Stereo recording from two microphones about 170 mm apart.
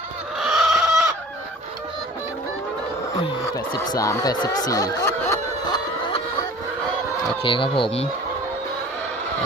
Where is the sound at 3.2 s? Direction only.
25° left (ahead or behind).